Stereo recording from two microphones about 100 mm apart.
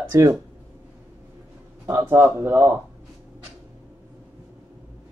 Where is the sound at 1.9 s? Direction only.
20° right (ahead or behind).